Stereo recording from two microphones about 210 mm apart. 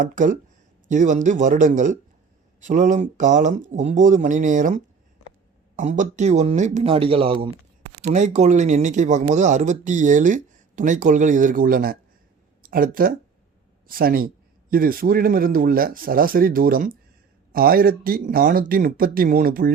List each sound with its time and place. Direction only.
0.0 s speech: 40° right (ahead or behind)